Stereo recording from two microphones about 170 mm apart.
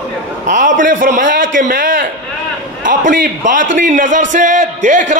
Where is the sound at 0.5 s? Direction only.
50° right (ahead or behind).